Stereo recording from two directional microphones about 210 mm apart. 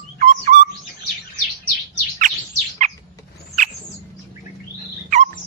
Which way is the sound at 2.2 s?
35° right (ahead or behind).